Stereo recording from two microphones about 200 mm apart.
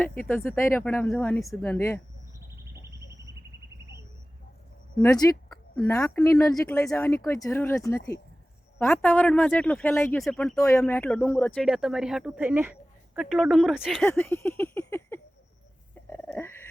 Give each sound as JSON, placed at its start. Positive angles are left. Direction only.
{"t": 0.2, "sound": "speech", "side_deg": 10}
{"t": 4.9, "sound": "speech", "side_deg": 20}
{"t": 5.5, "sound": "a sound", "side_deg": 5}
{"t": 5.9, "sound": "speech", "side_deg": 10}
{"t": 10.2, "sound": "speech", "side_deg": 0}
{"t": 11.6, "sound": "speech", "side_deg": -5}
{"t": 14.1, "sound": "speech", "side_deg": 10}
{"t": 16.0, "sound": "a sound", "side_deg": 10}